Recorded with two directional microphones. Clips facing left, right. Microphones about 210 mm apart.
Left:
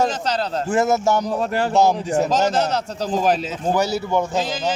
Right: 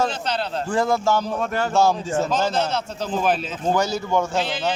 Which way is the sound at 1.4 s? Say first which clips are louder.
Left 2 dB; 35° left (ahead or behind).